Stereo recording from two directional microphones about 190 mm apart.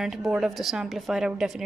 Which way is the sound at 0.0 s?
Centre (ahead or behind).